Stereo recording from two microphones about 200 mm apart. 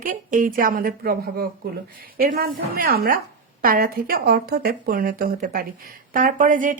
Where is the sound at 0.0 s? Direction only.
45° right (ahead or behind).